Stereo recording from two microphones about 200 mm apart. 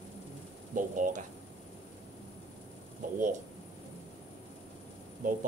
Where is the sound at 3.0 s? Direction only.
40° right (ahead or behind).